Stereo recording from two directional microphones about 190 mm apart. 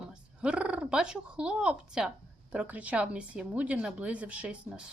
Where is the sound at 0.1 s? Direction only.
5° right (ahead or behind).